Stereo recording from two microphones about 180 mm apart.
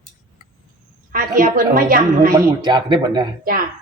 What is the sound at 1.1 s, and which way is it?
A woman's voice, 50° right (ahead or behind).